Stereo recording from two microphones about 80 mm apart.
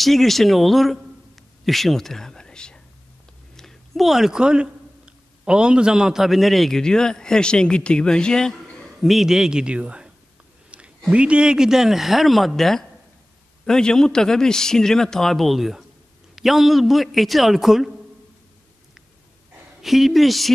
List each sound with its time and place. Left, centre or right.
0.0 s a man's voice: centre
10.7 s a sound: centre
11.1 s a man's voice: centre
19.8 s speech: centre